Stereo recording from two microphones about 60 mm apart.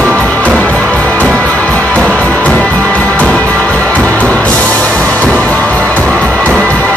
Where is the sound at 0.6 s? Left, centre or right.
Left.